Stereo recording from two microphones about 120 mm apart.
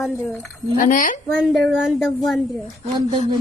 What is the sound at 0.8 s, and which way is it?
Speech, 90° left.